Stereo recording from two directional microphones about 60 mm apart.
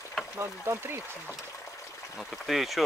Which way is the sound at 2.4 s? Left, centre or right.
Centre.